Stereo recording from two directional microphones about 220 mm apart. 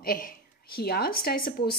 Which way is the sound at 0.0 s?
40° left (ahead or behind).